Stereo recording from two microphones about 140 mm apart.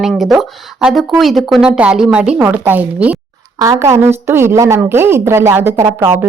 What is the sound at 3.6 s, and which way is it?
A woman's voice, 20° right (ahead or behind).